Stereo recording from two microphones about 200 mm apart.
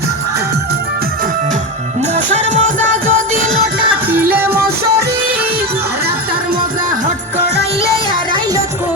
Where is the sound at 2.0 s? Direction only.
35° right (ahead or behind).